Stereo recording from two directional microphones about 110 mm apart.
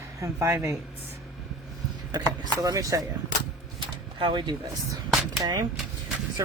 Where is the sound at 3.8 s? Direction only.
45° right (ahead or behind).